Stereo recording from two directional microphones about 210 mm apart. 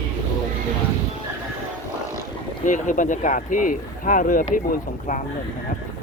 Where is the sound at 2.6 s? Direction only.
35° left (ahead or behind).